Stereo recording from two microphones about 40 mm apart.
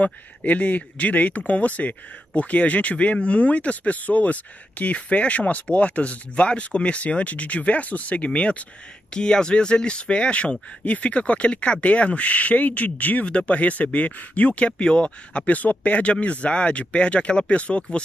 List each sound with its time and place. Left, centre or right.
0.0 s speech: left
13.3 s speech: left